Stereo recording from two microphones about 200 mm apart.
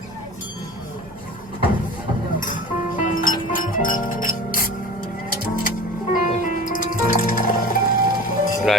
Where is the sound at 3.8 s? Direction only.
40° left (ahead or behind).